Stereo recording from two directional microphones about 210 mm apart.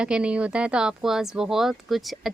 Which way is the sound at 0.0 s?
5° right (ahead or behind).